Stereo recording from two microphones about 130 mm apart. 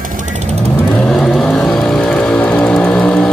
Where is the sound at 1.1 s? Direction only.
Centre (ahead or behind).